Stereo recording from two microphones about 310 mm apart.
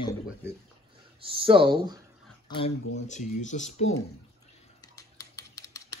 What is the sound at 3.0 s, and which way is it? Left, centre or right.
Speech, left.